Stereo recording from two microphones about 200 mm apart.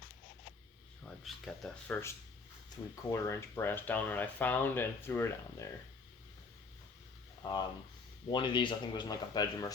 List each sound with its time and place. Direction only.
1.2 s speech: centre (ahead or behind)
2.6 s speech: 15° left (ahead or behind)
7.4 s speech: 20° left (ahead or behind)